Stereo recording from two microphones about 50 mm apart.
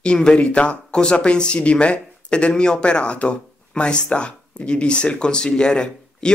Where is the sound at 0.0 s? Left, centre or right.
Centre.